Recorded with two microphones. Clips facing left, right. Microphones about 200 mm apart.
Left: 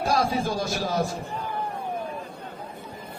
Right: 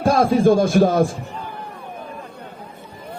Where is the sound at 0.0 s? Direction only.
50° right (ahead or behind).